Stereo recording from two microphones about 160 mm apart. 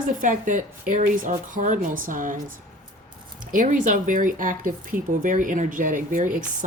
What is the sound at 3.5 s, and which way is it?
Speech, 55° right (ahead or behind).